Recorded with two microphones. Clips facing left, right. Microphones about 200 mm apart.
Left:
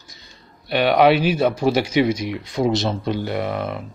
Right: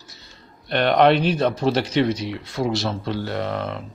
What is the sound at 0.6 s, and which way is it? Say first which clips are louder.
Speech: left 1 dB; 5° left (ahead or behind).